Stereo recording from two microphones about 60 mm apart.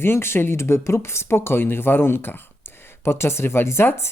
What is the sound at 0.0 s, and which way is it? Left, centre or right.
Speech, left.